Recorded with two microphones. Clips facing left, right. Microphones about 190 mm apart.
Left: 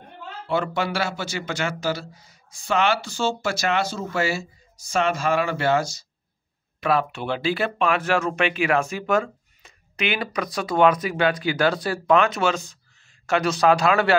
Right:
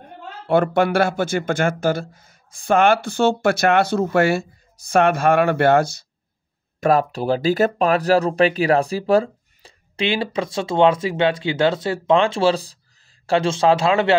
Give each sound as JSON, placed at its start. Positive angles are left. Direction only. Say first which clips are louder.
{"t": 0.5, "sound": "speech", "louder": "right 8 dB", "side_deg": -55}
{"t": 6.8, "sound": "a man's voice", "louder": "right 5 dB", "side_deg": -40}